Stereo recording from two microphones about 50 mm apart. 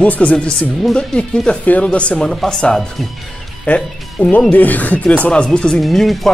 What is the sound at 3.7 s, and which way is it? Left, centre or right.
Speech, left.